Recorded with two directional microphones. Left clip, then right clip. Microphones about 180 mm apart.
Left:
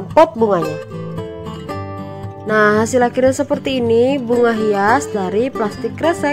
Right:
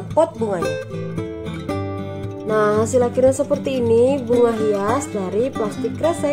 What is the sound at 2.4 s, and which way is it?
Speech, 25° left (ahead or behind).